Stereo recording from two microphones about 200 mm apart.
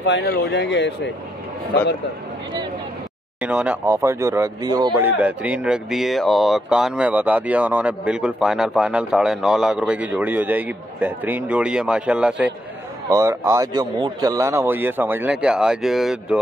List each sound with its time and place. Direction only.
0.0 s speech: 60° left (ahead or behind)
3.3 s speech: 5° right (ahead or behind)
5.2 s speech: 5° right (ahead or behind)